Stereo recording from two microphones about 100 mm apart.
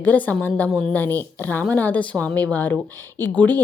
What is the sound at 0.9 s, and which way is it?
Speech, 20° left (ahead or behind).